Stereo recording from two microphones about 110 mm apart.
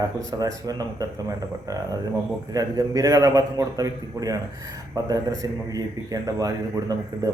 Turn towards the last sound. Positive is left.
turn(degrees=-35)  # may be behind; listen again after turning